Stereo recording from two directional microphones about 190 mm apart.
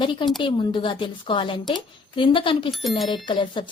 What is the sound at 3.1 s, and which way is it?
Speech, 25° left (ahead or behind).